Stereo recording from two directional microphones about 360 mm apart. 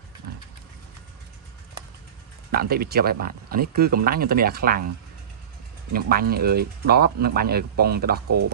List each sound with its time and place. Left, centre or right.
2.5 s speech: right
5.9 s speech: right